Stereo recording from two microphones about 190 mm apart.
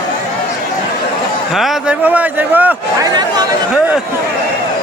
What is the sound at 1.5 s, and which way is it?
Speech, centre (ahead or behind).